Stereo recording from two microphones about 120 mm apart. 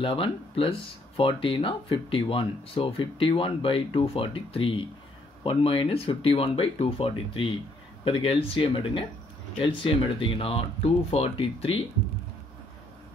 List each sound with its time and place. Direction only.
0.0 s speech: 45° left (ahead or behind)